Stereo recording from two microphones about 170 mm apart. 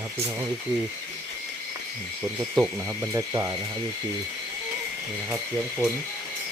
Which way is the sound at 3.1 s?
20° right (ahead or behind).